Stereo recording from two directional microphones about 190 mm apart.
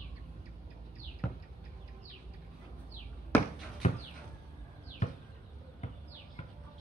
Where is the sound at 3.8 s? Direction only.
40° left (ahead or behind).